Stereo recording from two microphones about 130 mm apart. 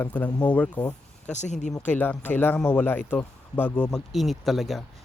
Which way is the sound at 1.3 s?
65° left (ahead or behind).